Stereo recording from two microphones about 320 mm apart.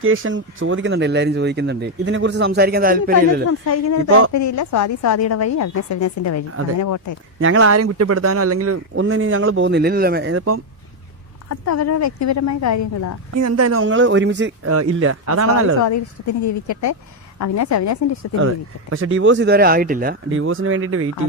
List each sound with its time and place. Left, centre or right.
0.0 s speech: right
3.7 s a woman's voice: left
7.3 s speech: right
11.4 s a woman's voice: left
13.3 s speech: right
15.8 s a woman's voice: left
18.3 s speech: right